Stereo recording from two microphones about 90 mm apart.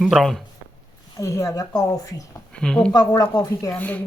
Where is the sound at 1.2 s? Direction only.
35° left (ahead or behind).